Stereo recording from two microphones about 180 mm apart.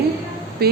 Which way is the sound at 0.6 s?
60° right (ahead or behind).